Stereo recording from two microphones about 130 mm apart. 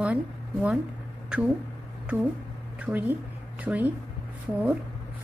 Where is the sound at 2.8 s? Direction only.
15° right (ahead or behind).